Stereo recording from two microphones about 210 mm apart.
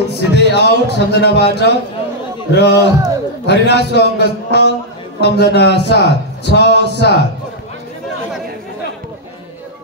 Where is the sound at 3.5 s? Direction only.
55° left (ahead or behind).